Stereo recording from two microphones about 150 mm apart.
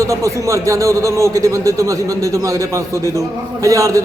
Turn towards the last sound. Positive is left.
turn(degrees=-20)  # may be behind; listen again after turning